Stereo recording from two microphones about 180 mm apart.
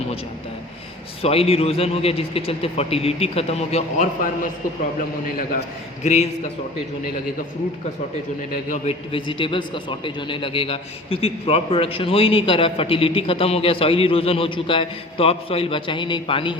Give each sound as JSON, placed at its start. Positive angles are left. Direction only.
{"t": 1.2, "sound": "a man's voice", "side_deg": 35}
{"t": 8.7, "sound": "a man's voice", "side_deg": 35}